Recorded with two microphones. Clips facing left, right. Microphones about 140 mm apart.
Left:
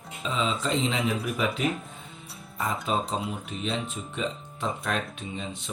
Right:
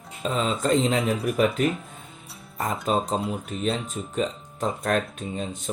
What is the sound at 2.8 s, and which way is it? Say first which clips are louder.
Speech: right 6 dB; 40° right (ahead or behind).